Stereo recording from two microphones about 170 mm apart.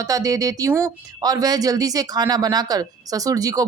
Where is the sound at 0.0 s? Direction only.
20° right (ahead or behind).